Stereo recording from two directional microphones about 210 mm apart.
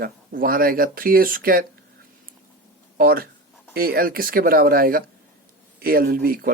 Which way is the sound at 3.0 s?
45° right (ahead or behind).